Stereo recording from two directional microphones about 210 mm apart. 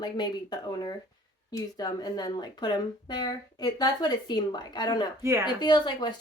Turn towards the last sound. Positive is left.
turn(degrees=20)  # may be behind; listen again after turning